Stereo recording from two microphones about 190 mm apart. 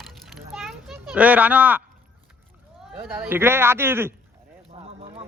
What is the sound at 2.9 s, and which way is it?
Speech, 10° right (ahead or behind).